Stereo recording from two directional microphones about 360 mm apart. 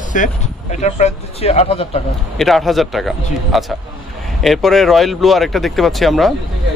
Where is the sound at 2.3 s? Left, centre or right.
Centre.